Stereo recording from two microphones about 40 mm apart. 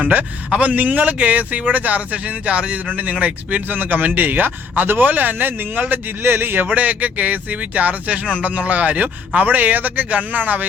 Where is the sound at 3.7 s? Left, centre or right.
Right.